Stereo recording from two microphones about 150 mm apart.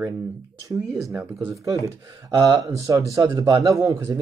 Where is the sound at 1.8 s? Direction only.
20° right (ahead or behind).